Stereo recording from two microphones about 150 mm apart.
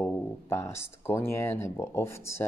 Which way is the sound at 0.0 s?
15° left (ahead or behind).